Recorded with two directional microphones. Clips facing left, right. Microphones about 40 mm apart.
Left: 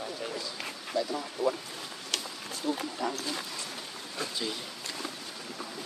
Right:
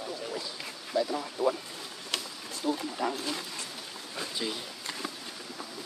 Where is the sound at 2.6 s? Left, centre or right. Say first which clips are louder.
Right 1 dB; centre.